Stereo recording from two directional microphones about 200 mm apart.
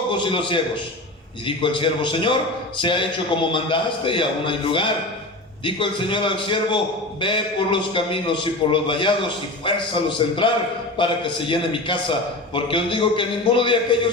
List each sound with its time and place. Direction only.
0.1 s a man's voice: 25° left (ahead or behind)